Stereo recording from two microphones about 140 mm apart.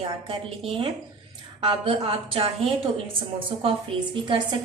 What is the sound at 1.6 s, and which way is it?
A woman's voice, 40° right (ahead or behind).